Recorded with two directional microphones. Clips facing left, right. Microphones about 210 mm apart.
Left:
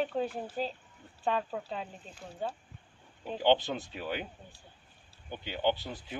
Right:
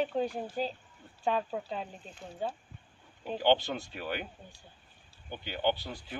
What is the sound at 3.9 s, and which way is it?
Speech, 5° right (ahead or behind).